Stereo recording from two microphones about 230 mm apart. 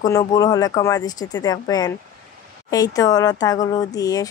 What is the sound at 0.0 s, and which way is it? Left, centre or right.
Speech, centre.